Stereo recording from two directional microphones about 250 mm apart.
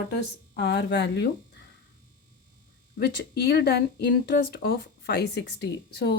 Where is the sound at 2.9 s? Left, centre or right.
Left.